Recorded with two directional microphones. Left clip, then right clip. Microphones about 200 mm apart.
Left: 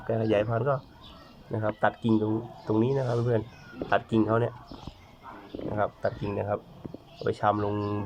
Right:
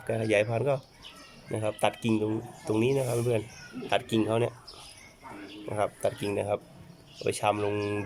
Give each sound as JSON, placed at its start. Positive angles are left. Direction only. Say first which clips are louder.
{"t": 0.1, "sound": "speech", "louder": "even", "side_deg": -10}
{"t": 5.7, "sound": "speech", "louder": "even", "side_deg": -15}